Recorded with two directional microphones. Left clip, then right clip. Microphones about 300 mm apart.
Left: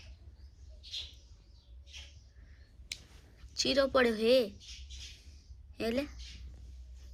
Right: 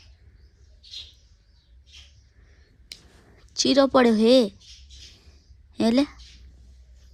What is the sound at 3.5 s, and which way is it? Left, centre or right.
Speech, right.